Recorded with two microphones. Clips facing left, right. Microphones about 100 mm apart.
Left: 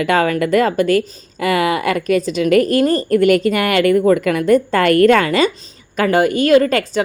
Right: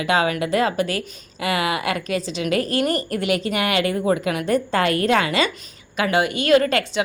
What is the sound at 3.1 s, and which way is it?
A woman's voice, 45° left (ahead or behind).